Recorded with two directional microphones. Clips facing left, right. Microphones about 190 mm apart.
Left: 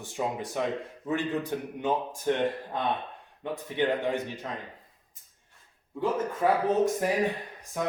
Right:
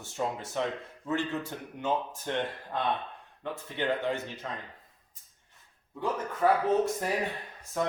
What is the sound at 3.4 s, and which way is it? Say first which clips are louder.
Speech: left 4 dB; 15° left (ahead or behind).